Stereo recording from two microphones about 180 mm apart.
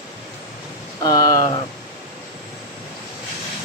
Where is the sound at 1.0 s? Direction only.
20° left (ahead or behind).